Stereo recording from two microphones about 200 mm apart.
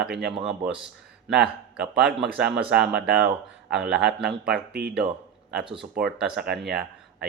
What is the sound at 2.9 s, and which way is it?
Speech, 50° right (ahead or behind).